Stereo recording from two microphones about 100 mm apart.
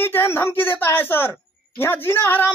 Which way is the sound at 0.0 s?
25° left (ahead or behind).